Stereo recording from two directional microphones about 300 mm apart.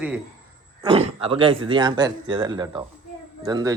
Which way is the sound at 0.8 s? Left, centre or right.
Centre.